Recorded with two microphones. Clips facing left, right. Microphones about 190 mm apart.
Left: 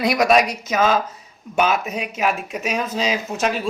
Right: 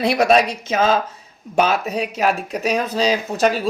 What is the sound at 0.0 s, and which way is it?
Speech, 30° right (ahead or behind).